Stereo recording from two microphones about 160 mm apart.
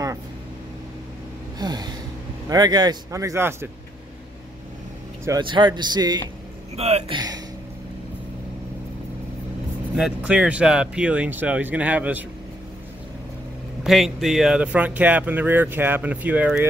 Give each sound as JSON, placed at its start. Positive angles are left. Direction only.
{"t": 1.6, "sound": "speech", "side_deg": -25}
{"t": 5.4, "sound": "speech", "side_deg": -30}
{"t": 6.8, "sound": "speech", "side_deg": -40}
{"t": 7.2, "sound": "a sound", "side_deg": -25}
{"t": 9.9, "sound": "speech", "side_deg": -5}
{"t": 13.8, "sound": "speech", "side_deg": 0}